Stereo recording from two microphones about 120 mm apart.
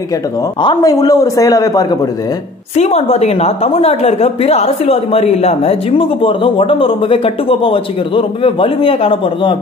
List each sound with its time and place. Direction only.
0.6 s a woman's voice: 40° left (ahead or behind)
0.9 s a man's voice: 30° left (ahead or behind)
2.7 s a woman's voice: 60° left (ahead or behind); by 9.6 s 45° left (ahead or behind)